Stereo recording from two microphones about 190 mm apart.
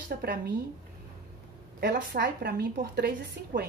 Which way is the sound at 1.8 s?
60° right (ahead or behind).